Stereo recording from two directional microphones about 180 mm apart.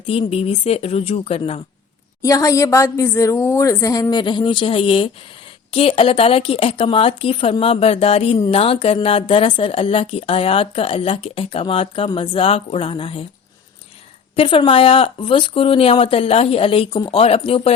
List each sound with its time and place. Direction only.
0.0 s speech: 30° left (ahead or behind)
2.2 s a woman's voice: 20° left (ahead or behind)
14.3 s speech: 30° left (ahead or behind)